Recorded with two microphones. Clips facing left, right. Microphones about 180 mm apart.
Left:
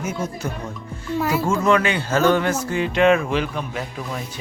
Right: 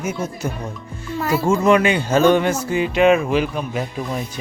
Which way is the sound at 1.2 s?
10° left (ahead or behind).